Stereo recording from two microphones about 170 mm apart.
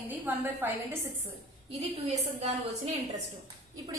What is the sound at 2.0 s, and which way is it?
Speech, 40° right (ahead or behind).